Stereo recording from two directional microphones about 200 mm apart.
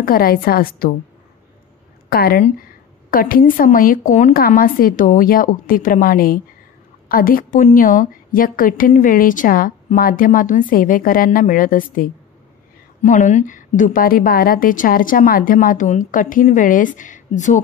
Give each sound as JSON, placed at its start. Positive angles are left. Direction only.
{"t": 0.0, "sound": "a woman's voice", "side_deg": 45}
{"t": 2.0, "sound": "a woman's voice", "side_deg": 50}